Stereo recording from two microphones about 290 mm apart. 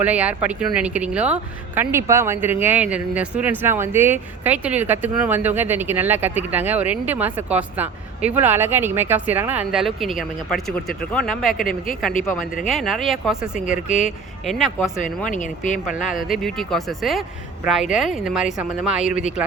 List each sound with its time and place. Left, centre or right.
0.0 s speech: centre
15.3 s speech: left
16.2 s speech: centre